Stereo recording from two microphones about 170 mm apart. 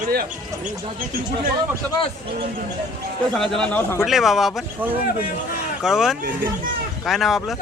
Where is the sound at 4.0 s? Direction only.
Centre (ahead or behind).